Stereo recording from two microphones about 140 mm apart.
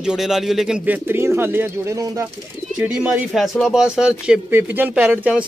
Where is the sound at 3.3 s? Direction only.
Centre (ahead or behind).